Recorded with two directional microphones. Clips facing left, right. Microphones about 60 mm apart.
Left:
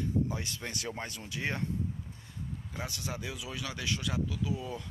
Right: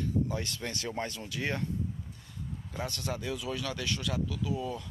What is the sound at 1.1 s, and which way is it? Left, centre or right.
Speech, left.